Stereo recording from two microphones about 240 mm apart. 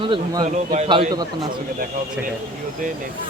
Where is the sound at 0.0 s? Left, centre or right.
Right.